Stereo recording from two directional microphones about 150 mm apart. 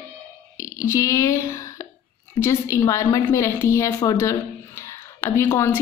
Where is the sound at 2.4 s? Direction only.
20° left (ahead or behind).